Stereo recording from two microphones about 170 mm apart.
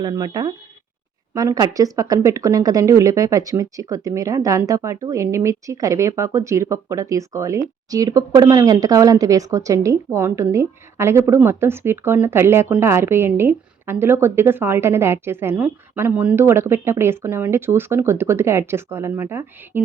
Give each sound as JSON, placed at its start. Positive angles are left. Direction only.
{"t": 0.0, "sound": "speech", "side_deg": -20}